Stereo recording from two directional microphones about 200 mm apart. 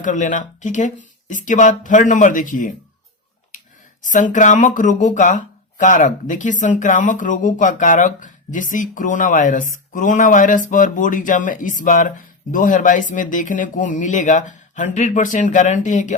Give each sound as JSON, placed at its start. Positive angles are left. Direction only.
{"t": 0.0, "sound": "speech", "side_deg": 40}
{"t": 4.0, "sound": "speech", "side_deg": 40}